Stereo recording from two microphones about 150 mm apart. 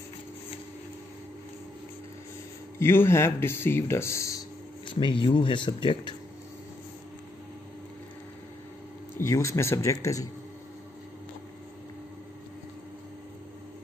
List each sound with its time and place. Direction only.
2.8 s speech: 15° left (ahead or behind)
4.8 s speech: 35° left (ahead or behind)
9.2 s speech: 20° left (ahead or behind)